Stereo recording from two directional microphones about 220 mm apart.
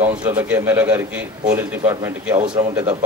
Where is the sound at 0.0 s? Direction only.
10° right (ahead or behind).